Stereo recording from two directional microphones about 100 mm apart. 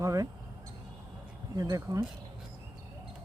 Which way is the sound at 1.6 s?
35° right (ahead or behind).